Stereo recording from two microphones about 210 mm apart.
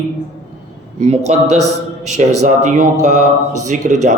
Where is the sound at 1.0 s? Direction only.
30° right (ahead or behind).